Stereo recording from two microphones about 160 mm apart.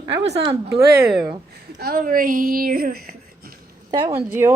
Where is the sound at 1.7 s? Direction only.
65° right (ahead or behind).